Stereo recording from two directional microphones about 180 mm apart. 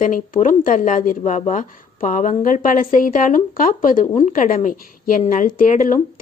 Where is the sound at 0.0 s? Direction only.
45° left (ahead or behind).